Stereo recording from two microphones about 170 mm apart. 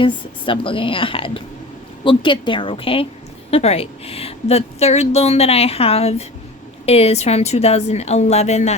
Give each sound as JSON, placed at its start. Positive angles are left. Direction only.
{"t": 0.0, "sound": "a woman's voice", "side_deg": 30}